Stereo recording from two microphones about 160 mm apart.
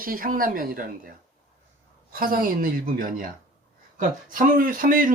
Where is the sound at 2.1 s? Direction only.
60° right (ahead or behind).